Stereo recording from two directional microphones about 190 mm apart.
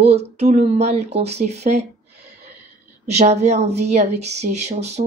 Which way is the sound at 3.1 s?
35° right (ahead or behind).